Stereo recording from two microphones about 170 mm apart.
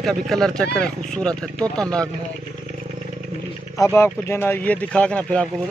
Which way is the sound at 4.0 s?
15° left (ahead or behind).